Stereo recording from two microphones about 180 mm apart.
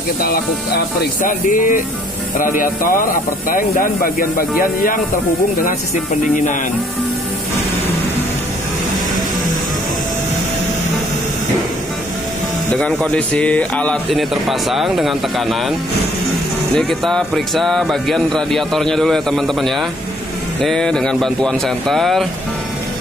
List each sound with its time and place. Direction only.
1.2 s speech: 45° left (ahead or behind)
6.2 s speech: 45° left (ahead or behind)
12.7 s speech: 5° left (ahead or behind)
16.7 s speech: centre (ahead or behind)